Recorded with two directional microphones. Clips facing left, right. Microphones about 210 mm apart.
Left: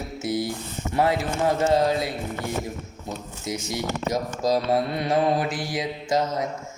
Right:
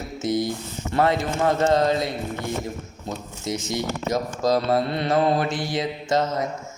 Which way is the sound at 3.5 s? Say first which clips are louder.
Right 2 dB; 10° left (ahead or behind).